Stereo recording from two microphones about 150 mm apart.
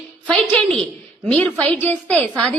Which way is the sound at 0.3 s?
10° left (ahead or behind).